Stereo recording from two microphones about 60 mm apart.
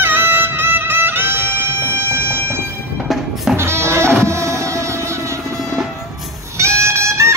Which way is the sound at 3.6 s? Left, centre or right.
Right.